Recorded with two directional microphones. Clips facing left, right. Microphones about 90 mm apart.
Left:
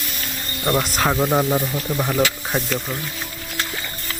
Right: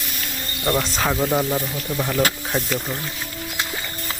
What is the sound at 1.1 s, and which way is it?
Speech, 20° left (ahead or behind).